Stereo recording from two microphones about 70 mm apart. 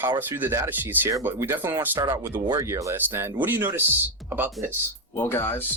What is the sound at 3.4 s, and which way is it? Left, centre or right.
Speech, right.